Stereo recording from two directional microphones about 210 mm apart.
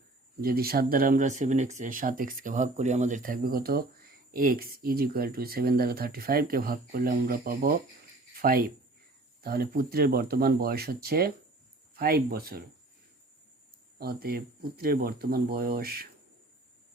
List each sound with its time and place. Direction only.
0.4 s speech: 45° right (ahead or behind)
14.0 s speech: 45° right (ahead or behind)